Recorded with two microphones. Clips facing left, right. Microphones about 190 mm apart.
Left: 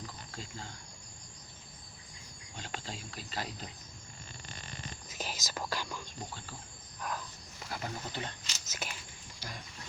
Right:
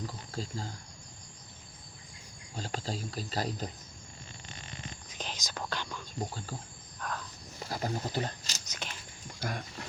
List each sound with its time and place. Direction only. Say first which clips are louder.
0.1 s a sound: right 7 dB; 40° right (ahead or behind)
2.6 s speech: right 7 dB; 40° right (ahead or behind)
5.0 s whispering: left 1 dB; 5° left (ahead or behind)
6.3 s speech: right 6 dB; 40° right (ahead or behind)
7.0 s cricket: even; 5° left (ahead or behind)
7.6 s speech: right 6 dB; 35° right (ahead or behind)
8.6 s a sound: left 2 dB; 5° left (ahead or behind)
9.4 s speech: right 9 dB; 65° right (ahead or behind)